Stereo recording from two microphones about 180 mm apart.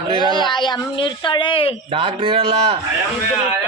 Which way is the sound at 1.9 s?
30° right (ahead or behind).